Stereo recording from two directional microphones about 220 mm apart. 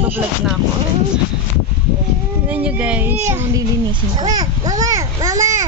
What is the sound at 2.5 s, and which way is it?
Speech, 5° right (ahead or behind).